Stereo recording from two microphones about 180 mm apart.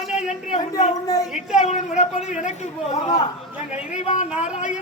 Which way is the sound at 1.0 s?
20° left (ahead or behind).